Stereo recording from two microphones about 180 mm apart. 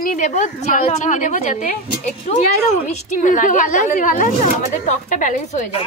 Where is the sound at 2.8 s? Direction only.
40° left (ahead or behind).